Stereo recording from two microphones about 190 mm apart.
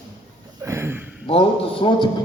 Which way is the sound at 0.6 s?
15° right (ahead or behind).